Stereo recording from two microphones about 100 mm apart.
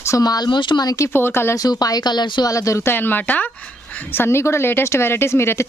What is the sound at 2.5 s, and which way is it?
Speech, 30° left (ahead or behind).